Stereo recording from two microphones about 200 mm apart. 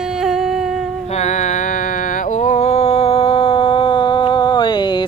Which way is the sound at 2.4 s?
35° left (ahead or behind).